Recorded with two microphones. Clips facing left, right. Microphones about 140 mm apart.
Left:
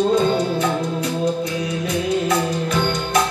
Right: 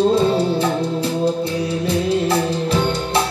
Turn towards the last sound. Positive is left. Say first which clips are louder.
# right 1 dB
turn(degrees=-30)  # may be behind; listen again after turning